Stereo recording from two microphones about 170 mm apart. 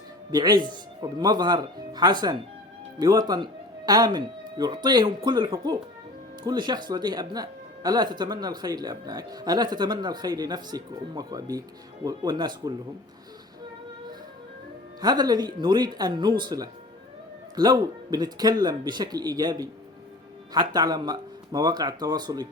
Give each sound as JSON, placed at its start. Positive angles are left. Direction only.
{"t": 0.3, "sound": "speech", "side_deg": -25}
{"t": 15.0, "sound": "speech", "side_deg": -25}